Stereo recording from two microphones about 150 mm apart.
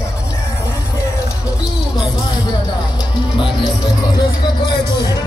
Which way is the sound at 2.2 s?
30° left (ahead or behind).